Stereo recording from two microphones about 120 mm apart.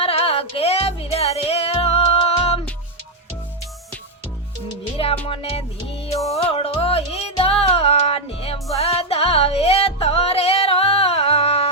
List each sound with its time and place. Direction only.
0.0 s music: 55° left (ahead or behind)
5.3 s music: 55° left (ahead or behind)